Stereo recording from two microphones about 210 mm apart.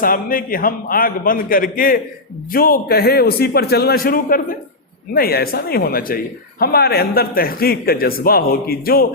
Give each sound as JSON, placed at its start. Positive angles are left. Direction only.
{"t": 0.0, "sound": "a man's voice", "side_deg": 40}